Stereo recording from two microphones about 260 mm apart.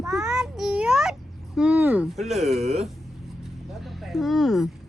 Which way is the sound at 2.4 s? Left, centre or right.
Right.